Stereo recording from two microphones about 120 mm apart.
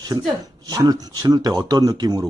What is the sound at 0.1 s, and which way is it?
Speech, 25° right (ahead or behind).